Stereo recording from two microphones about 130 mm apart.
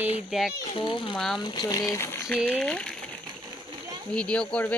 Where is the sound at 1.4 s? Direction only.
35° left (ahead or behind).